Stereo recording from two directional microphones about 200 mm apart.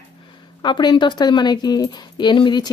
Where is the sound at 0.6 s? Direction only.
20° left (ahead or behind).